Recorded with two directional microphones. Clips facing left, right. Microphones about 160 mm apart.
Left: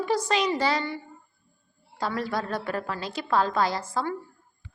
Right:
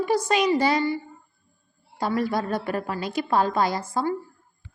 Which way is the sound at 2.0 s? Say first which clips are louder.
Right 4 dB; 10° right (ahead or behind).